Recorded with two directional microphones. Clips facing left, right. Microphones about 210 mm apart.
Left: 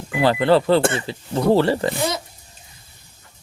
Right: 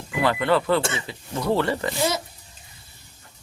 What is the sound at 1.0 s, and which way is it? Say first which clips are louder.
Speech: left 7 dB; 30° left (ahead or behind).